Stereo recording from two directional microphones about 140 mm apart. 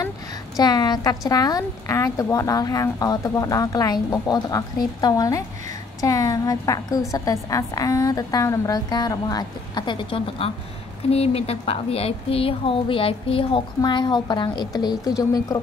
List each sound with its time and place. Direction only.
0.6 s a woman's voice: 30° left (ahead or behind)